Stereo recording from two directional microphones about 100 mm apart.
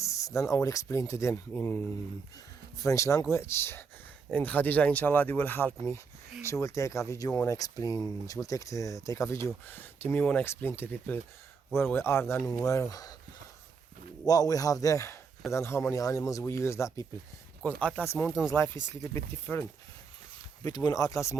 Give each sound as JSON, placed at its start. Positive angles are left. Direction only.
{"t": 0.0, "sound": "speech", "side_deg": 30}
{"t": 1.5, "sound": "speech", "side_deg": 20}
{"t": 2.7, "sound": "speech", "side_deg": 30}
{"t": 6.5, "sound": "speech", "side_deg": 30}
{"t": 12.6, "sound": "speech", "side_deg": 35}
{"t": 14.3, "sound": "speech", "side_deg": 40}
{"t": 17.6, "sound": "speech", "side_deg": 15}
{"t": 18.0, "sound": "speech", "side_deg": 25}
{"t": 20.7, "sound": "speech", "side_deg": 40}